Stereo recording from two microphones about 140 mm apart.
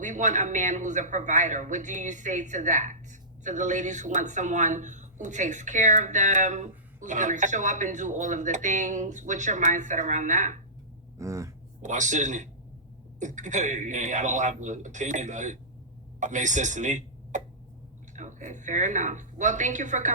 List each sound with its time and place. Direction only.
0.0 s speech: 60° right (ahead or behind)
11.2 s a sound: 20° right (ahead or behind)
11.8 s speech: 60° right (ahead or behind)